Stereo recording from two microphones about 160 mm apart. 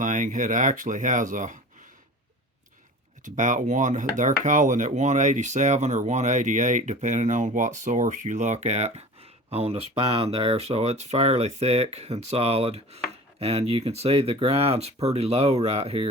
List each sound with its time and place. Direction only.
0.0 s speech: 55° right (ahead or behind)
3.2 s speech: 50° right (ahead or behind)